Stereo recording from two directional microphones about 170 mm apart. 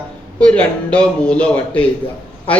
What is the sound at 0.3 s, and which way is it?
A man's voice, 5° left (ahead or behind).